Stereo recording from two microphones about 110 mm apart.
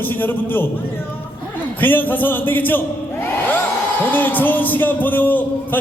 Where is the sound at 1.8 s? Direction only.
15° left (ahead or behind).